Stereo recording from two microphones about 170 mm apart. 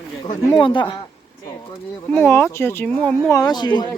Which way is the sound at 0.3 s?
25° left (ahead or behind).